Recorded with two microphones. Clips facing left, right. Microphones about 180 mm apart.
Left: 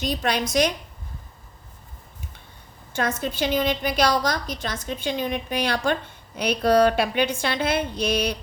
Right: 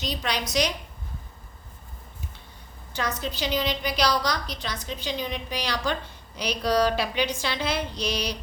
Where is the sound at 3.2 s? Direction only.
50° left (ahead or behind).